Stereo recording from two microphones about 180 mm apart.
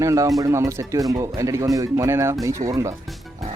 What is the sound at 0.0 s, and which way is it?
Speech, 20° right (ahead or behind).